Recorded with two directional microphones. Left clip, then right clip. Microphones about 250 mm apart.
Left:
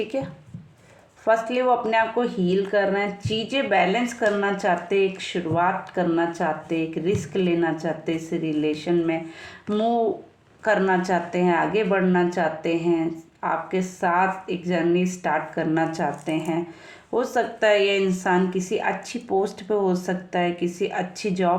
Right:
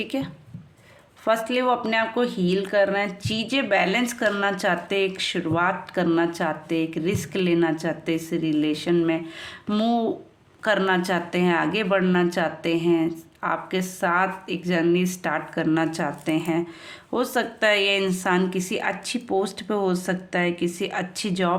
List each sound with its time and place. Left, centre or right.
0.1 s speech: right